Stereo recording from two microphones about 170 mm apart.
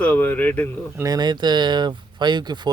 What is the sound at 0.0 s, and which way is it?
Speech, 10° left (ahead or behind).